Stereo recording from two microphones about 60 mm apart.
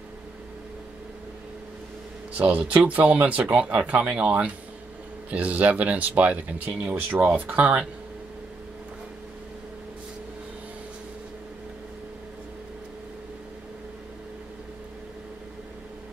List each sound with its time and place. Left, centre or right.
2.3 s speech: right